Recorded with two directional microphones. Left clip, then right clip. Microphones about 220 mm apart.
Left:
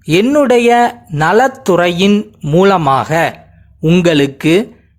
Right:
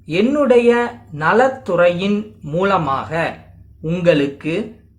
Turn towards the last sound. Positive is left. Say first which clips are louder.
# left 8 dB
turn(degrees=45)  # may be behind; listen again after turning